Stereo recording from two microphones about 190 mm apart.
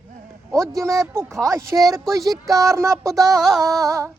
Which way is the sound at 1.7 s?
Centre (ahead or behind).